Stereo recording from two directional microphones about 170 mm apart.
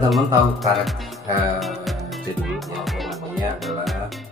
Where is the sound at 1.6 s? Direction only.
Centre (ahead or behind).